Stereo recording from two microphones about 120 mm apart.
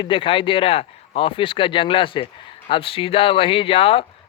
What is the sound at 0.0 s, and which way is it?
Speech, 45° left (ahead or behind).